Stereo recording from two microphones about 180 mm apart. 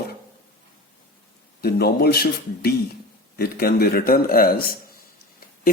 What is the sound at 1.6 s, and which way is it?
Speech, 60° left (ahead or behind).